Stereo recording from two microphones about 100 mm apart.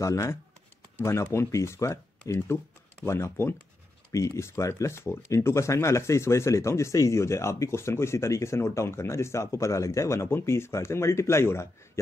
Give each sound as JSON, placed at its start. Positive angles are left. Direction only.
{"t": 0.0, "sound": "speech", "side_deg": 30}